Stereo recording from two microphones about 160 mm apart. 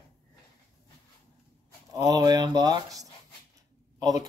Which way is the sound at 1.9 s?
25° right (ahead or behind).